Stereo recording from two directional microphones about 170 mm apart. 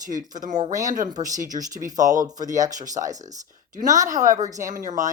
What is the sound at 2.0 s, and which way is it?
A woman's voice, 20° right (ahead or behind).